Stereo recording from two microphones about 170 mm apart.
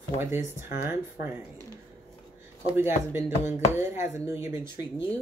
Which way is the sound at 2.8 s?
10° right (ahead or behind).